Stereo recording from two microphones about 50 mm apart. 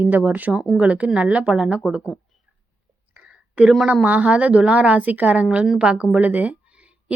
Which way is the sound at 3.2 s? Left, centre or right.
Right.